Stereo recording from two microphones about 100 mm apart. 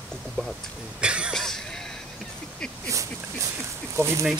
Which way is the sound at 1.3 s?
5° left (ahead or behind).